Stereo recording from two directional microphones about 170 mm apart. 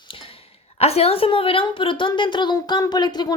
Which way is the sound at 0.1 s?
30° left (ahead or behind).